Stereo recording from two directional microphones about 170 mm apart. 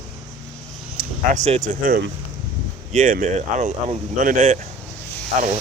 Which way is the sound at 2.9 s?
50° right (ahead or behind).